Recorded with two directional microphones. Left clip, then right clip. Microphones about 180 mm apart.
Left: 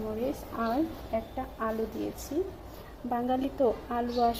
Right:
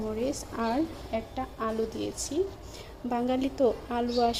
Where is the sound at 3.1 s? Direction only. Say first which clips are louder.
Right 1 dB; 10° right (ahead or behind).